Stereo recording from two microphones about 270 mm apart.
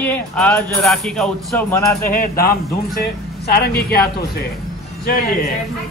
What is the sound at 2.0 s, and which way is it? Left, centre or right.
Speech, left.